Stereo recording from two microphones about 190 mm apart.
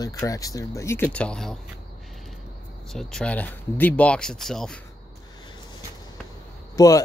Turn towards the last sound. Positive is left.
turn(degrees=20)  # may be behind; listen again after turning